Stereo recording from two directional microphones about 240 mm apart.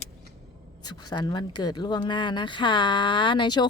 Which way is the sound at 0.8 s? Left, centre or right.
Centre.